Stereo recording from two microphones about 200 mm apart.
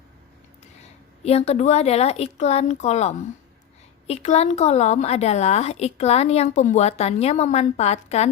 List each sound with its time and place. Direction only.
1.2 s a woman's voice: 30° left (ahead or behind)